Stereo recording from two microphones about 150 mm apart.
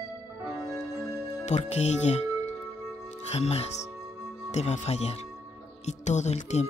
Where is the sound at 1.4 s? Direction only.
50° left (ahead or behind).